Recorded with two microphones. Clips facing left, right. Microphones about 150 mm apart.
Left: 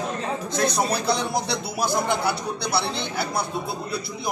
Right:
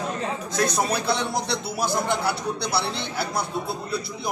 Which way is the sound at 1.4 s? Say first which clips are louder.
Even; centre (ahead or behind).